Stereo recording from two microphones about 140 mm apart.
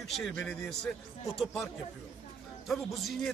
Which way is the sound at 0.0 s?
5° left (ahead or behind).